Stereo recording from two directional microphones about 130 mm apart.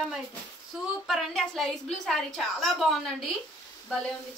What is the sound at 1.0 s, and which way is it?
A woman's voice, centre (ahead or behind).